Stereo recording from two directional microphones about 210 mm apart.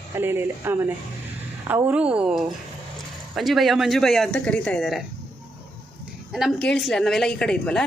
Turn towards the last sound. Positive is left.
turn(degrees=5)  # may be behind; listen again after turning